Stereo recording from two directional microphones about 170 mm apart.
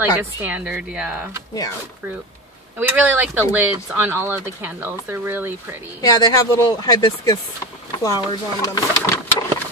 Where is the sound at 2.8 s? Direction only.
10° right (ahead or behind).